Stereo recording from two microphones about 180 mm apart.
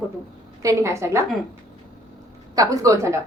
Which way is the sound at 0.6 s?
15° right (ahead or behind).